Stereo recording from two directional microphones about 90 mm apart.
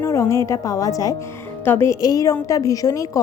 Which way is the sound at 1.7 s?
30° left (ahead or behind).